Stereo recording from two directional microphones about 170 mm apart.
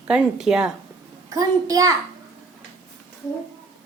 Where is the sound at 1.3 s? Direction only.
20° right (ahead or behind).